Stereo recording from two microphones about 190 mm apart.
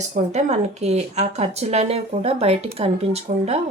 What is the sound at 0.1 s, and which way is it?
Speech, 35° right (ahead or behind).